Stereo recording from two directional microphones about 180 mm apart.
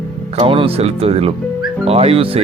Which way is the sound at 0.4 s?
30° right (ahead or behind).